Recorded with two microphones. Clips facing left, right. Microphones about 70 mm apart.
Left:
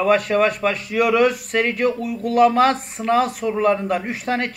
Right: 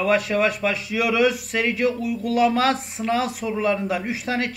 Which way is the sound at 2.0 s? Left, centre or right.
Left.